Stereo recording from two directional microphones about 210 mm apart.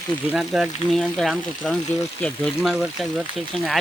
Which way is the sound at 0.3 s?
Centre (ahead or behind).